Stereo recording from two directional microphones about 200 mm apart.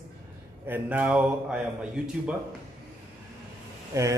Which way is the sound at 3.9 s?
15° right (ahead or behind).